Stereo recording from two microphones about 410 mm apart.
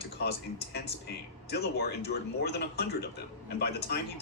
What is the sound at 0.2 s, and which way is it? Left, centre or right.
Speech, left.